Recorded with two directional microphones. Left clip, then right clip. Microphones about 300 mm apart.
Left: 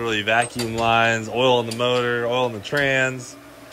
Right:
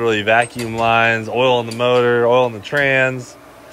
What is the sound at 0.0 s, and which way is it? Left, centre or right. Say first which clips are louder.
Speech: right 6 dB; centre.